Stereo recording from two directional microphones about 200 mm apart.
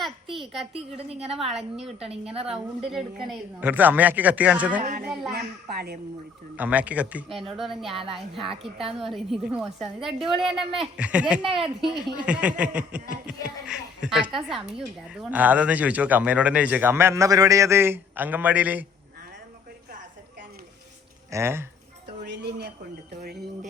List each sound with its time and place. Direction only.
0.0 s a sound: centre (ahead or behind)
0.7 s a woman's voice: 30° right (ahead or behind)
3.6 s a woman's voice: 10° right (ahead or behind)
4.8 s a child's voice: 40° right (ahead or behind)
5.3 s a child's voice: 50° right (ahead or behind)
6.6 s a woman's voice: 5° right (ahead or behind)
7.9 s a woman's voice: 25° right (ahead or behind)
9.0 s a woman's voice: centre (ahead or behind)
21.2 s speech: 15° right (ahead or behind)
22.3 s a sound: 55° right (ahead or behind)